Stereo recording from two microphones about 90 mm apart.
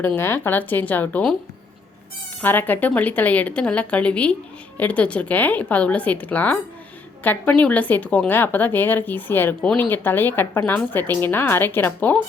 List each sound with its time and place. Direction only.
0.2 s speech: 25° left (ahead or behind)
2.4 s speech: 20° left (ahead or behind)